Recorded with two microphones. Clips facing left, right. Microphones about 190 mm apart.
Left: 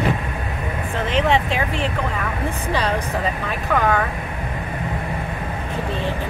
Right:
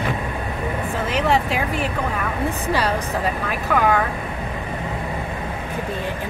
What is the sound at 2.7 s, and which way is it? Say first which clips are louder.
Speech: left 1 dB; 5° right (ahead or behind).